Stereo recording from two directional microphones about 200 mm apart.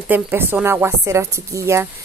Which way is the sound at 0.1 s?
10° right (ahead or behind).